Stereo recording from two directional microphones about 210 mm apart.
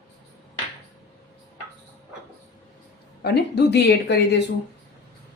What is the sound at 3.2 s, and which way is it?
Speech, 50° left (ahead or behind).